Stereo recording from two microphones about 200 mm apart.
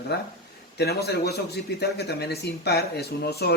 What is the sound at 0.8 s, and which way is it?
A man's voice, 55° left (ahead or behind).